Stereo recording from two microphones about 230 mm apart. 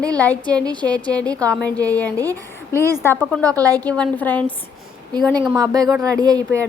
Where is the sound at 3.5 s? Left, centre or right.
Centre.